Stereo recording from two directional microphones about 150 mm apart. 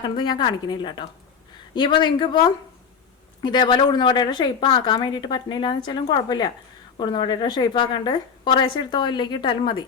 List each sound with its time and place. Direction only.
0.2 s a woman's voice: 30° left (ahead or behind)